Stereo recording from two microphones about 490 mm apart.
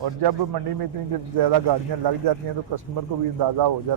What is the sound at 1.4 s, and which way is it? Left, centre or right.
Speech, right.